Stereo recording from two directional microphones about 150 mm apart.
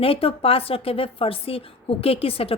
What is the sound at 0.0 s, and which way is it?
A woman's voice, 40° left (ahead or behind).